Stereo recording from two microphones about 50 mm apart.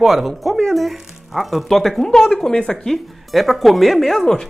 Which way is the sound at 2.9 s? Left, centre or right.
Centre.